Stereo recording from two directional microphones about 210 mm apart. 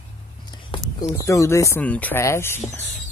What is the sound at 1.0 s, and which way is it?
Speech, 15° left (ahead or behind).